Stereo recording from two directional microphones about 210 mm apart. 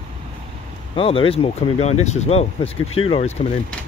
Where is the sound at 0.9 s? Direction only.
25° left (ahead or behind).